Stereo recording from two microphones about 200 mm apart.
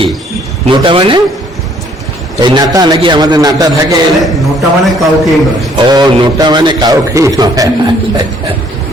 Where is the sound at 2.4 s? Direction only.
20° right (ahead or behind).